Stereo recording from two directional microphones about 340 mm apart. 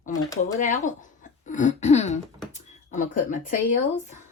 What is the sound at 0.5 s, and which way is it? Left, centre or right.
Speech, left.